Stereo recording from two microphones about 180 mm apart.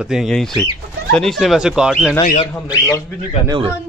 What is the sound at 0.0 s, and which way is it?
Speech, 5° right (ahead or behind).